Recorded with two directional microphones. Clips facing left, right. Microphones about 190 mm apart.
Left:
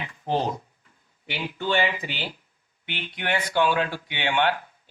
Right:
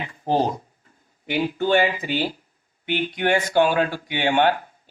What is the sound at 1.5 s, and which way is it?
Speech, 45° right (ahead or behind).